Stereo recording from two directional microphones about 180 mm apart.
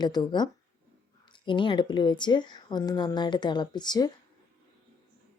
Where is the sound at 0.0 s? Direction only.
25° left (ahead or behind).